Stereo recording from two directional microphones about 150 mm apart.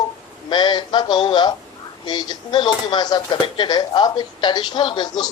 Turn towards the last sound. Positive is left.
turn(degrees=30)  # may be behind; listen again after turning